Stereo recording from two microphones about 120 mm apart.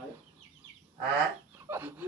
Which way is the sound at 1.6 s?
20° right (ahead or behind).